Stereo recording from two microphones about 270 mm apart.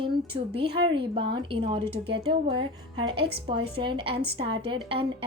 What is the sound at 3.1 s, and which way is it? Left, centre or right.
Speech, right.